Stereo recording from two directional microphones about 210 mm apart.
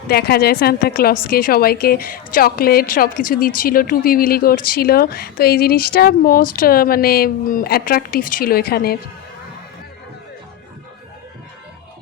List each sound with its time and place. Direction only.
0.1 s a woman's voice: 50° left (ahead or behind)